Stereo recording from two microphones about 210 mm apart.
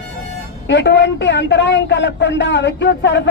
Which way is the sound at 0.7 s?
55° left (ahead or behind).